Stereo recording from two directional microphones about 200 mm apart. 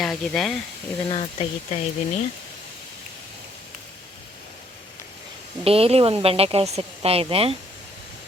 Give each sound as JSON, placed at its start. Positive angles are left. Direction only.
{"t": 0.0, "sound": "speech", "side_deg": 0}
{"t": 1.0, "sound": "speech", "side_deg": 30}
{"t": 5.6, "sound": "a woman's voice", "side_deg": -30}